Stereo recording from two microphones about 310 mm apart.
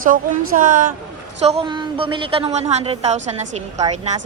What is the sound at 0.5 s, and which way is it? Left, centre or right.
A woman's voice, right.